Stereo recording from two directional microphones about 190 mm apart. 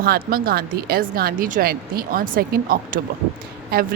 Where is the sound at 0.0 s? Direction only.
50° right (ahead or behind).